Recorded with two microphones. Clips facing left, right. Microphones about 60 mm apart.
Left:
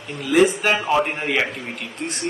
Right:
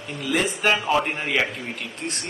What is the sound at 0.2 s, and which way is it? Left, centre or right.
A man's voice, centre.